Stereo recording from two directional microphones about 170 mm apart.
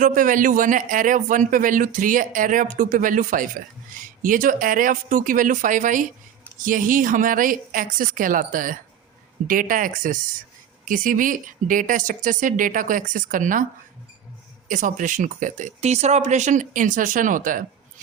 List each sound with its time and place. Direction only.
0.0 s speech: 50° right (ahead or behind)
14.7 s speech: 50° right (ahead or behind)